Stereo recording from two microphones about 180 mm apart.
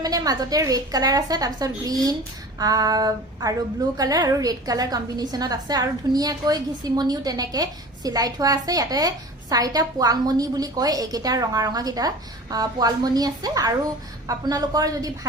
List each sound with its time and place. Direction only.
0.0 s a woman's voice: 20° right (ahead or behind)